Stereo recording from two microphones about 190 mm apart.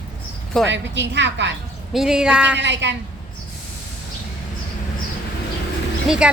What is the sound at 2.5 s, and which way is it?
Speech, 70° right (ahead or behind).